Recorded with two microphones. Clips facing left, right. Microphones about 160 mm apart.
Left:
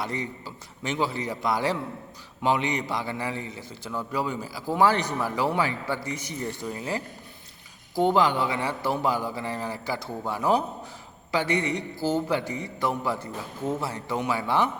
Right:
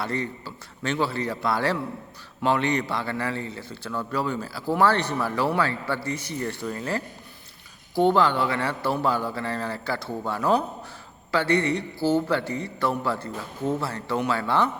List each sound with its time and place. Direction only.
0.0 s a man's voice: 15° left (ahead or behind)